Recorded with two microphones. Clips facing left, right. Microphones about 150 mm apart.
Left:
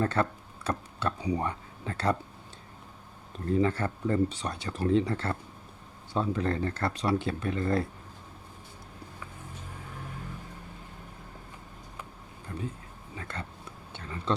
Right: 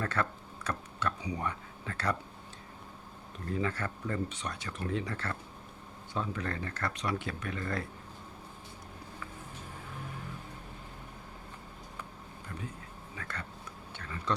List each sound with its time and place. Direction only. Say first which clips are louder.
0.0 s speech: left 6 dB; 30° left (ahead or behind)
3.4 s speech: left 7 dB; 30° left (ahead or behind)
13.1 s a sound: left 4 dB; 25° left (ahead or behind)